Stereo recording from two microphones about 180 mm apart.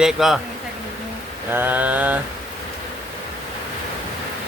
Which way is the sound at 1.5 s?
10° right (ahead or behind).